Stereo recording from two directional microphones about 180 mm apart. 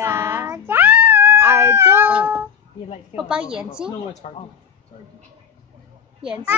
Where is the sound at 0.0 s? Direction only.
15° right (ahead or behind).